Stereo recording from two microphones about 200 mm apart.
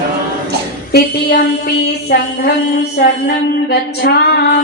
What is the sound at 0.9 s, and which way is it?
Female singing, 50° left (ahead or behind).